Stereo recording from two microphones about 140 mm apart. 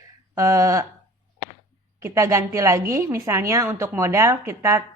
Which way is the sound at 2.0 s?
20° right (ahead or behind).